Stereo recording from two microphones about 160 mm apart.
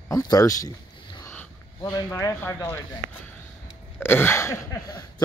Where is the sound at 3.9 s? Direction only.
15° left (ahead or behind).